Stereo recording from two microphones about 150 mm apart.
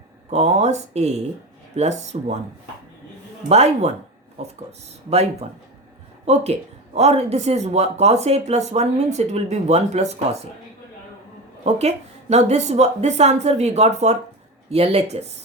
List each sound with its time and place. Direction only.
0.3 s speech: 45° right (ahead or behind)
3.5 s speech: 45° right (ahead or behind)
11.6 s speech: 45° right (ahead or behind)